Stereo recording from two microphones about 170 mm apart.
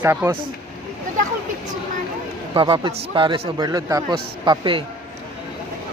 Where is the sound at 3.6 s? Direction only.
20° right (ahead or behind).